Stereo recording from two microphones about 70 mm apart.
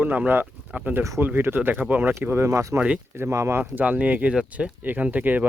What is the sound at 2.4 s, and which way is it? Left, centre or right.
Speech, right.